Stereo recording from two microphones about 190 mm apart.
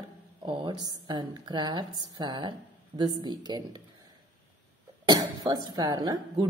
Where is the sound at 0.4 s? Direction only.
25° right (ahead or behind).